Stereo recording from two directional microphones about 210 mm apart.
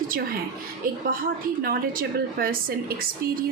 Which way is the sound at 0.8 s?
40° right (ahead or behind).